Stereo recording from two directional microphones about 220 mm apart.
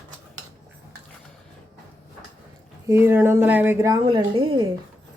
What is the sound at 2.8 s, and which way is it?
Speech, 10° right (ahead or behind).